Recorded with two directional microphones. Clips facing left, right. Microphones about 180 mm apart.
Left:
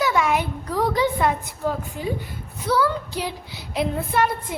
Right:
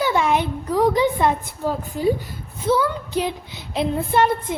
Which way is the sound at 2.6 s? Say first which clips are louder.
Right 2 dB; 20° right (ahead or behind).